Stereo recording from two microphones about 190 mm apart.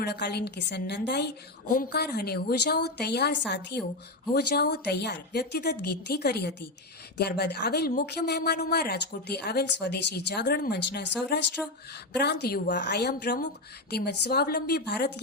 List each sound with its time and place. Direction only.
0.0 s speech: 60° left (ahead or behind)